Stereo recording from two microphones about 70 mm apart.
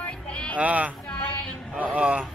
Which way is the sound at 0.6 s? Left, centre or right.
Right.